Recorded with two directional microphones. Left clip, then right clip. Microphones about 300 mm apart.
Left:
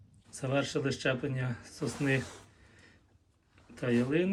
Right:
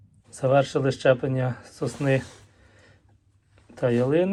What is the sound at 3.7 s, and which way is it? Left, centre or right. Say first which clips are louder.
Speech: right 9 dB; centre.